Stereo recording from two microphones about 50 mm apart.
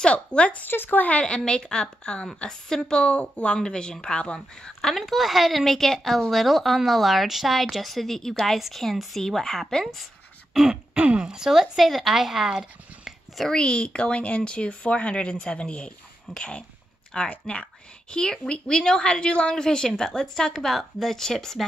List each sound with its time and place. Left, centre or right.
0.0 s speech: left
0.7 s speech: left
1.2 s a woman's voice: centre
4.9 s speech: centre
10.5 s throat clearing: centre
11.0 s speech: centre
13.6 s a woman's voice: centre